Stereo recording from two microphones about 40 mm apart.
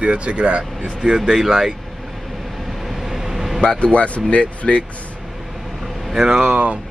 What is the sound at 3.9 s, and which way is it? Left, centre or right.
Speech, left.